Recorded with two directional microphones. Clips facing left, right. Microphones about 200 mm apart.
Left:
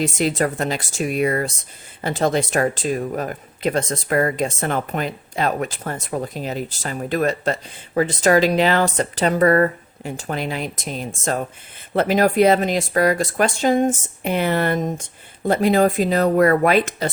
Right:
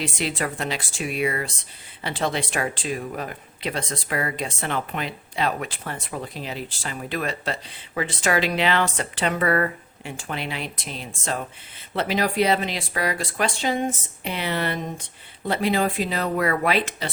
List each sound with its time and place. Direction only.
0.0 s speech: 45° left (ahead or behind)